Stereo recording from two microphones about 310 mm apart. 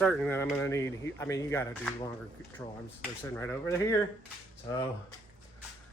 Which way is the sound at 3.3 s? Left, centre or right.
Centre.